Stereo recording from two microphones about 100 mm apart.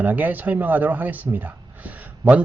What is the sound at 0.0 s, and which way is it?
A man's voice, 15° right (ahead or behind).